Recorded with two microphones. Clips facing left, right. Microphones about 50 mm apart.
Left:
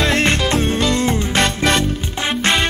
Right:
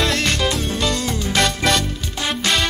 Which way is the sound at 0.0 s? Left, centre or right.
Left.